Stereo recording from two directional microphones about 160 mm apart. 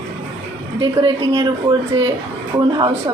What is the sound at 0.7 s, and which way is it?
Speech, 30° right (ahead or behind).